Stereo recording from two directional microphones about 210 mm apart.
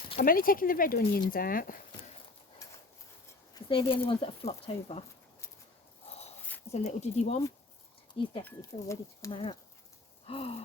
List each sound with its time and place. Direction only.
0.3 s speech: 45° left (ahead or behind)
3.5 s speech: 25° left (ahead or behind)
6.7 s speech: 30° left (ahead or behind)
8.4 s speech: 15° left (ahead or behind)